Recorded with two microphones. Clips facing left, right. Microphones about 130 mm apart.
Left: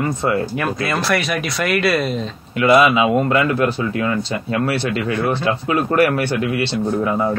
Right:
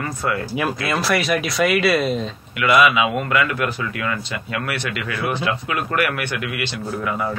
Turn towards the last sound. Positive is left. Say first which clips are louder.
# left 6 dB
turn(degrees=30)  # may be behind; listen again after turning